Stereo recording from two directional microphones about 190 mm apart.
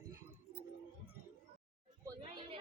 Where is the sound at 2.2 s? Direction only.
30° right (ahead or behind).